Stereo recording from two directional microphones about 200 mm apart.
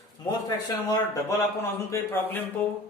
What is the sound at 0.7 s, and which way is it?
A man's voice, 20° left (ahead or behind).